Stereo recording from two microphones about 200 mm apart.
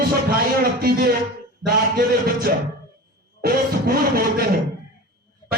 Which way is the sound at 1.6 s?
50° right (ahead or behind).